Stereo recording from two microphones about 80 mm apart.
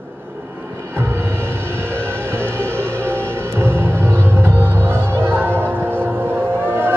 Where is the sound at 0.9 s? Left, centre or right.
Right.